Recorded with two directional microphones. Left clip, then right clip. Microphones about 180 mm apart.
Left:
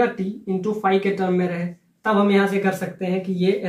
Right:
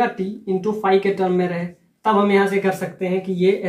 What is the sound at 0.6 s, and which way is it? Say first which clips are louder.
Speech: right 2 dB; 30° right (ahead or behind).